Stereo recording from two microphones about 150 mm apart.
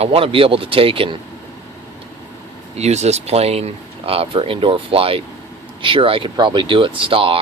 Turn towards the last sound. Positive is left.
turn(degrees=-35)  # may be behind; listen again after turning